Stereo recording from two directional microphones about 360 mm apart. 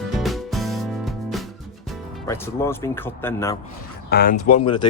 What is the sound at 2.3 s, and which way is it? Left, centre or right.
Speech, centre.